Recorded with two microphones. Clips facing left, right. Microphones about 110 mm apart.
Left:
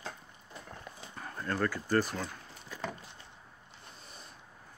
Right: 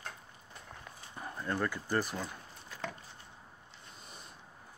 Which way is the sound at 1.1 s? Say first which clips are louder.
Left 1 dB; 15° right (ahead or behind).